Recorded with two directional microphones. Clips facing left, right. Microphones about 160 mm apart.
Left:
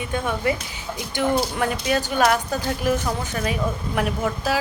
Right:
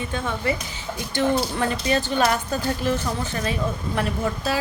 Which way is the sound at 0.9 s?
10° left (ahead or behind).